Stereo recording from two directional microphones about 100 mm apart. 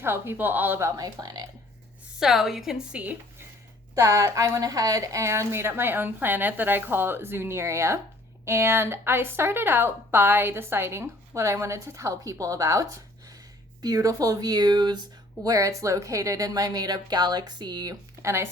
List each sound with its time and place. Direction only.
0.0 s a woman's voice: 25° right (ahead or behind); by 1.5 s 40° right (ahead or behind)
2.1 s a woman's voice: 5° right (ahead or behind)
3.9 s a woman's voice: 30° right (ahead or behind)
15.4 s a woman's voice: 35° right (ahead or behind)
18.2 s speech: 30° right (ahead or behind)